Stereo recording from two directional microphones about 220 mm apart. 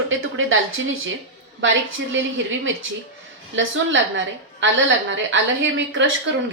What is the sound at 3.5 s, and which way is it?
A woman's voice, 55° right (ahead or behind).